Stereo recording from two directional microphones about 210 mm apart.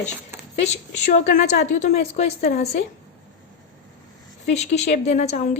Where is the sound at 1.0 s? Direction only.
35° left (ahead or behind).